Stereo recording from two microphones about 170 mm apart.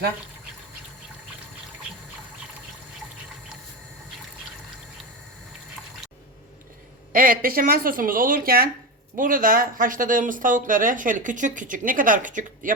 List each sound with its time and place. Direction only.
7.1 s speech: 55° right (ahead or behind)